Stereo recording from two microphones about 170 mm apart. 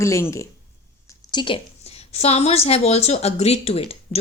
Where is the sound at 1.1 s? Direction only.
25° left (ahead or behind).